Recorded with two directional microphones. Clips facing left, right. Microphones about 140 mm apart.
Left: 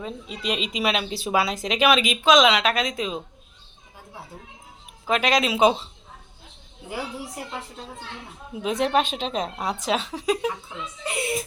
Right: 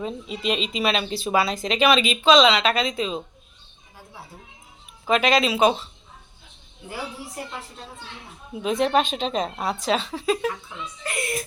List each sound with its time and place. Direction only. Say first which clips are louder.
0.0 s speech: right 3 dB; centre (ahead or behind)
5.0 s speech: right 2 dB; 10° left (ahead or behind)
8.6 s speech: right 1 dB; 10° left (ahead or behind)